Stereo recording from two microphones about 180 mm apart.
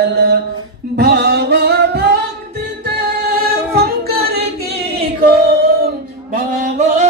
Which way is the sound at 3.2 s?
60° right (ahead or behind).